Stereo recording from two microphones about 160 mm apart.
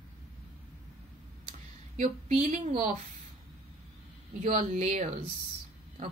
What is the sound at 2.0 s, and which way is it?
Speech, 50° right (ahead or behind).